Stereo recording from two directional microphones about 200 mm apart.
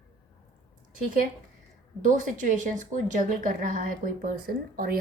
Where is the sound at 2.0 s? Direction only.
40° right (ahead or behind).